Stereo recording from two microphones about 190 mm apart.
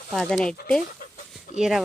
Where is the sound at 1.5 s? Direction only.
Centre (ahead or behind).